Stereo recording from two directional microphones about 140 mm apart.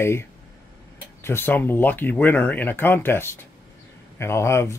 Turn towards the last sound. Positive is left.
turn(degrees=20)  # may be behind; listen again after turning